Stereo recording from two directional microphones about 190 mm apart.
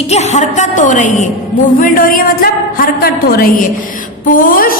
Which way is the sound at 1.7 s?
45° left (ahead or behind).